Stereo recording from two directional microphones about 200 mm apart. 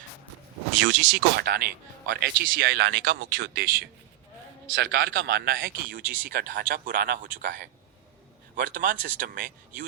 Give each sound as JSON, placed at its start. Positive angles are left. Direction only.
{"t": 0.8, "sound": "speech", "side_deg": -55}
{"t": 4.6, "sound": "speech", "side_deg": -60}